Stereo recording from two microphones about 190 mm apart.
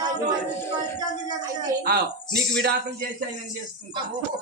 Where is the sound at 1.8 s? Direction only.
55° right (ahead or behind).